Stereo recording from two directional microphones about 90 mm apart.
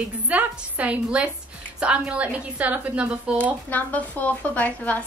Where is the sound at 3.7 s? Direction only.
20° left (ahead or behind).